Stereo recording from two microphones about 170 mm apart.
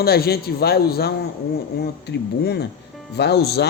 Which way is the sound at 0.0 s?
65° left (ahead or behind).